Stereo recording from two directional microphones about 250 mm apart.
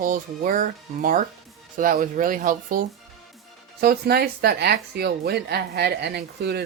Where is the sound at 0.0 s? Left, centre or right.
Right.